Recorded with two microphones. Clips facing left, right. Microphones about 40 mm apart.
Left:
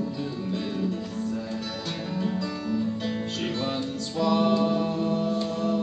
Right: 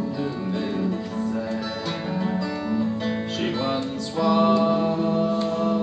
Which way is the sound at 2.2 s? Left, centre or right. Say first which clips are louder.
Right 2 dB; right.